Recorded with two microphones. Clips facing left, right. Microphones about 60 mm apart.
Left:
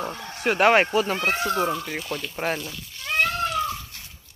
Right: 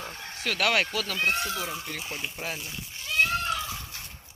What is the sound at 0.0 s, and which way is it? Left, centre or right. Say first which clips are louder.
Bow-wow: left 7 dB; left.